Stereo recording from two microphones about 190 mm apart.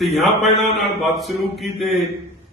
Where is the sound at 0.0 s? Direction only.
Centre (ahead or behind).